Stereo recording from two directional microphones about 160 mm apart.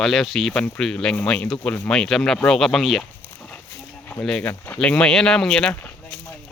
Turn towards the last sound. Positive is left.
turn(degrees=10)  # may be behind; listen again after turning